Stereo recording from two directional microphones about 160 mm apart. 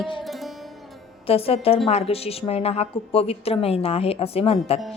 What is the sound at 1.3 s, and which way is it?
Speech, 35° left (ahead or behind).